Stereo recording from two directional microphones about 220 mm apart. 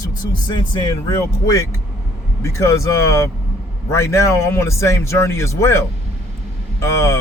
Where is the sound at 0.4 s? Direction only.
20° left (ahead or behind).